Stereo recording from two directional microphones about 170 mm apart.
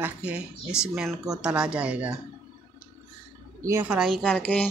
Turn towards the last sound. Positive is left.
turn(degrees=10)  # may be behind; listen again after turning